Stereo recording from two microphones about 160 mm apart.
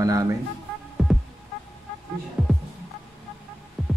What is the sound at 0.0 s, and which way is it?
Speech, 20° right (ahead or behind).